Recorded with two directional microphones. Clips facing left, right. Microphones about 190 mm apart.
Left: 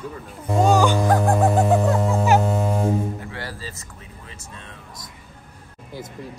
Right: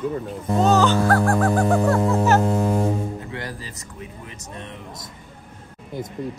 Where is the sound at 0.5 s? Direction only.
10° left (ahead or behind).